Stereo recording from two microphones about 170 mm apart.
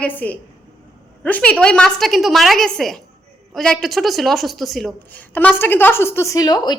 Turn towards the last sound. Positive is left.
turn(degrees=25)  # may be behind; listen again after turning